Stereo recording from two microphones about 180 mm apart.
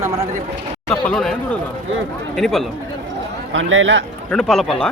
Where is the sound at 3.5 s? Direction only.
90° right.